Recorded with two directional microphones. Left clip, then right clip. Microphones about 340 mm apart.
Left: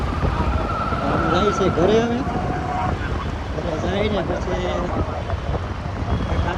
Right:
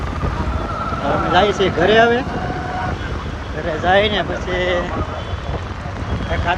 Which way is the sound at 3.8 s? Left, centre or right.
Centre.